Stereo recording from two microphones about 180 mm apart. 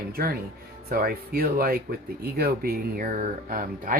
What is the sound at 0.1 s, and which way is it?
Speech, 55° right (ahead or behind).